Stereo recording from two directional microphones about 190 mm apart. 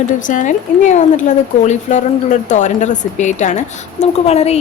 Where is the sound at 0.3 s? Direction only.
40° left (ahead or behind).